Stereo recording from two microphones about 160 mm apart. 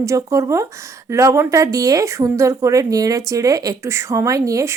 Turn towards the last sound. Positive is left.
turn(degrees=-20)  # may be behind; listen again after turning